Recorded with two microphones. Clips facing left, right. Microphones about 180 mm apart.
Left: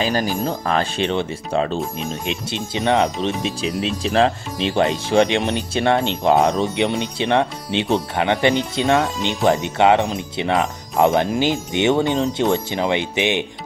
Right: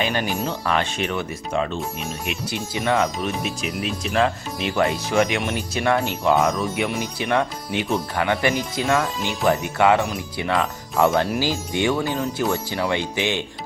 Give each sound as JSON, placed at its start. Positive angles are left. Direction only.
{"t": 0.0, "sound": "speech", "side_deg": 40}